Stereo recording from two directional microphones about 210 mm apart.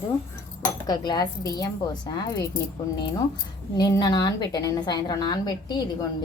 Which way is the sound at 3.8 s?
20° left (ahead or behind).